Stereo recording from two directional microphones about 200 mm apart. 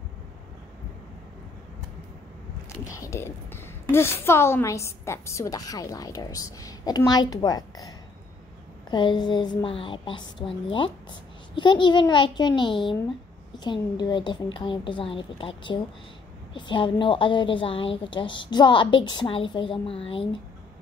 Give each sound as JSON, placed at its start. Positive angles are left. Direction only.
{"t": 3.0, "sound": "a woman's voice", "side_deg": 15}
{"t": 8.9, "sound": "a woman's voice", "side_deg": 25}